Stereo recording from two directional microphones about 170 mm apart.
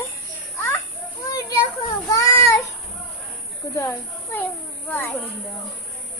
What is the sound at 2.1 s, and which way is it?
Child singing, 20° left (ahead or behind).